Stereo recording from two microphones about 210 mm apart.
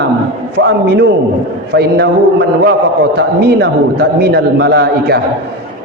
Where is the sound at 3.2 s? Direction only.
50° right (ahead or behind).